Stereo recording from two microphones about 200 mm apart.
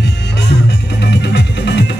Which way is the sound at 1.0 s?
55° left (ahead or behind).